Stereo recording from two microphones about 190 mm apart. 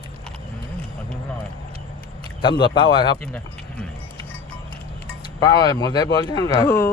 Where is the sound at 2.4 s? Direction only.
25° left (ahead or behind).